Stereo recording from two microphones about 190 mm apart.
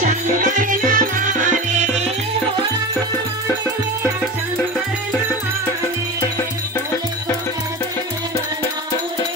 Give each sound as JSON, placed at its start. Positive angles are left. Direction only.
{"t": 0.0, "sound": "music", "side_deg": -40}